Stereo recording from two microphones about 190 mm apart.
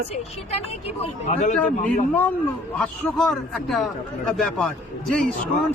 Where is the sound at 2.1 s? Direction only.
10° left (ahead or behind).